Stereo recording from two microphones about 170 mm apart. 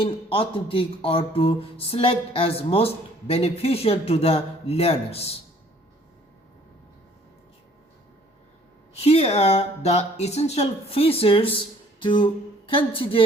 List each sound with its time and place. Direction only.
0.0 s speech: 30° left (ahead or behind)
9.0 s speech: 35° left (ahead or behind)
12.0 s a sound: 30° left (ahead or behind)